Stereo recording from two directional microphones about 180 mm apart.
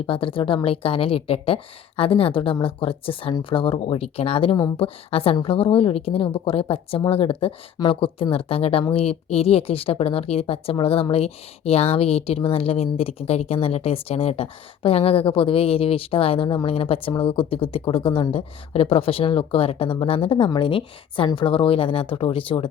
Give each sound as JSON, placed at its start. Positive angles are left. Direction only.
{"t": 0.0, "sound": "speech", "side_deg": 30}